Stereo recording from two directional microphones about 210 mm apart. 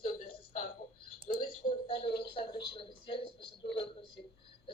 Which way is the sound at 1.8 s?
25° left (ahead or behind).